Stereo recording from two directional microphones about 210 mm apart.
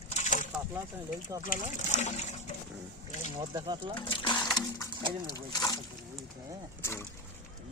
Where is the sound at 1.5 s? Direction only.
35° left (ahead or behind).